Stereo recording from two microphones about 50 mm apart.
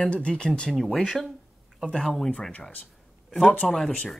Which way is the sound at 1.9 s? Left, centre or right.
Centre.